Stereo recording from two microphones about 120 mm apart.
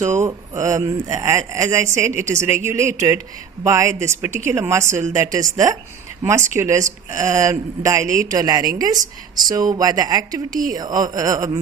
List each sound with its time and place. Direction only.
0.0 s a woman's voice: 25° right (ahead or behind)